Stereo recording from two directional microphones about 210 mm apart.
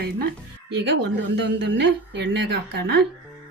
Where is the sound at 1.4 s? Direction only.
55° right (ahead or behind).